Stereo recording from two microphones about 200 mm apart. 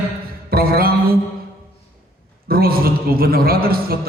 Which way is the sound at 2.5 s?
50° right (ahead or behind).